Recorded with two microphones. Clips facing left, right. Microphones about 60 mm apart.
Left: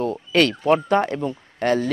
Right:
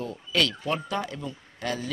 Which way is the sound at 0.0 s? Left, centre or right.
Left.